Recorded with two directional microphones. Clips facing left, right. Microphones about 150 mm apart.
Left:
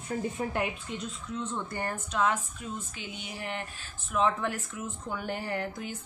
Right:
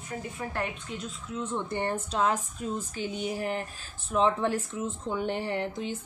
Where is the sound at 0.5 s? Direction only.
5° left (ahead or behind).